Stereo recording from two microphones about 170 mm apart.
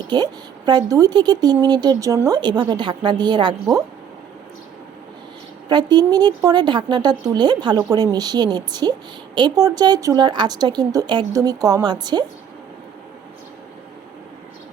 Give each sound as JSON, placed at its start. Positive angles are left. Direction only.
{"t": 0.1, "sound": "a woman's voice", "side_deg": -25}
{"t": 5.6, "sound": "a woman's voice", "side_deg": -25}